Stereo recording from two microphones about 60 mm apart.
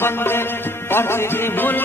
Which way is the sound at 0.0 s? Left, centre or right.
Left.